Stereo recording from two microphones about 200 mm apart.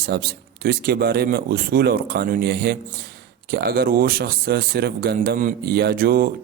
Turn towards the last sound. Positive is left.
turn(degrees=-45)  # may be behind; listen again after turning